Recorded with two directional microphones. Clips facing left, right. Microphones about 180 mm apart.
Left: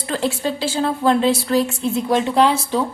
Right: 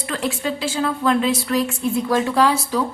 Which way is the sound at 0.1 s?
30° left (ahead or behind).